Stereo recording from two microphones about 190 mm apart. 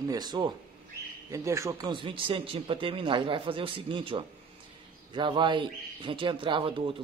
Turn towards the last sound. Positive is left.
turn(degrees=-30)  # may be behind; listen again after turning